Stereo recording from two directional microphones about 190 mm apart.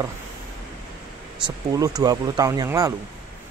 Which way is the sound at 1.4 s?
20° right (ahead or behind).